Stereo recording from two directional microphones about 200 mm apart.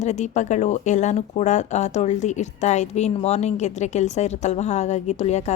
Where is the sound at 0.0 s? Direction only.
35° left (ahead or behind).